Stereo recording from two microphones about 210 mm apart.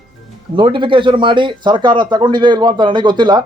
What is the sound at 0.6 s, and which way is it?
A man's voice, 20° right (ahead or behind).